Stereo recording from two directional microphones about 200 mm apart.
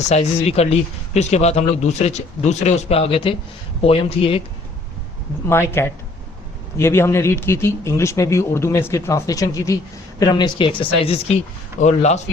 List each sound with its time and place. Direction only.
0.1 s a woman's voice: 30° left (ahead or behind)
5.5 s a woman's voice: 10° left (ahead or behind); by 12.2 s 35° left (ahead or behind)